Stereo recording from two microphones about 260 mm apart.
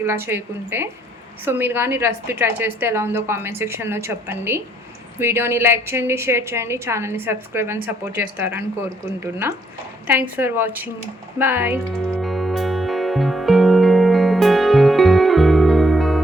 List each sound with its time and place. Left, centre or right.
0.0 s a woman's voice: centre
12.1 s music: centre